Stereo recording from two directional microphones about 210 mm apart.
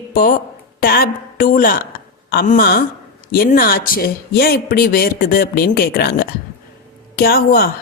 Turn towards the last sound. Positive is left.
turn(degrees=45)  # may be behind; listen again after turning